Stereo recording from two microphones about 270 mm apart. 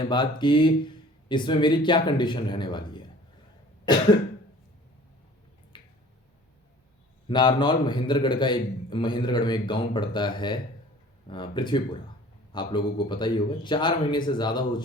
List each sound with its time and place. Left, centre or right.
0.0 s a man's voice: centre
5.7 s finger snapping: centre
7.3 s a man's voice: centre